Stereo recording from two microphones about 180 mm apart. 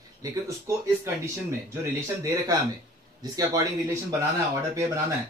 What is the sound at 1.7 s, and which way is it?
A man's voice, 15° right (ahead or behind).